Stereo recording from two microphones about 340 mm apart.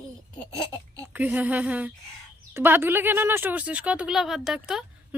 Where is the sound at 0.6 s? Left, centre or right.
Centre.